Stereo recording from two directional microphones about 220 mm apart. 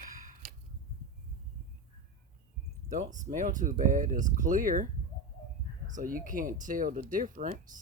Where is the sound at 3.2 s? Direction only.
35° right (ahead or behind).